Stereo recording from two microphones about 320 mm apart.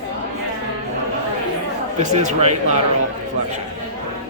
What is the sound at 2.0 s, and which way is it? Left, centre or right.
Speech, right.